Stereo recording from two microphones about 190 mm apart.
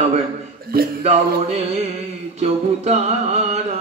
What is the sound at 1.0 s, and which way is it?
A man's voice, 35° right (ahead or behind).